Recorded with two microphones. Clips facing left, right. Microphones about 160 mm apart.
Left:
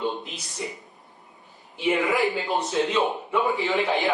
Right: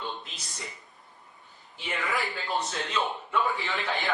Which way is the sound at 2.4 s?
20° left (ahead or behind).